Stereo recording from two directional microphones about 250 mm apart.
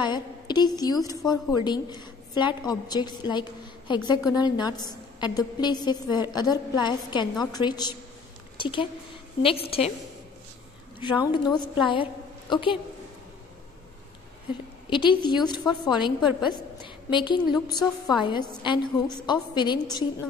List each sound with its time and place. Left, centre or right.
0.0 s a woman's voice: centre
11.0 s a woman's voice: centre
14.9 s a woman's voice: centre
16.8 s a sound: centre
17.6 s a woman's voice: centre